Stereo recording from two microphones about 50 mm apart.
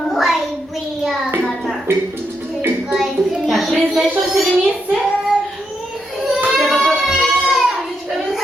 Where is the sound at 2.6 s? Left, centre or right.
Right.